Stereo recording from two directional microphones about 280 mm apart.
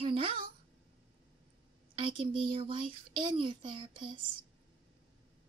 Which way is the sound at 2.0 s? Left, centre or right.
Centre.